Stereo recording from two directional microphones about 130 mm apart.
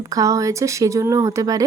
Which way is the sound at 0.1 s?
25° right (ahead or behind).